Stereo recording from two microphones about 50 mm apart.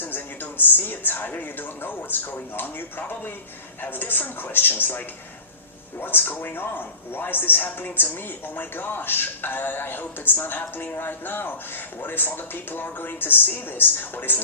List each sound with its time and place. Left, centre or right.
0.0 s a man's voice: left